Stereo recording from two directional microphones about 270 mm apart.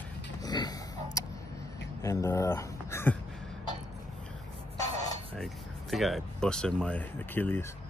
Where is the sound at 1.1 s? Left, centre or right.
Centre.